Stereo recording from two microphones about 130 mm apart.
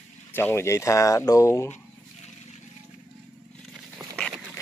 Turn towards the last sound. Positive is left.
turn(degrees=5)  # may be behind; listen again after turning